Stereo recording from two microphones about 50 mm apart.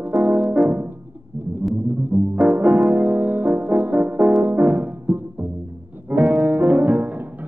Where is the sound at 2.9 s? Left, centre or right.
Right.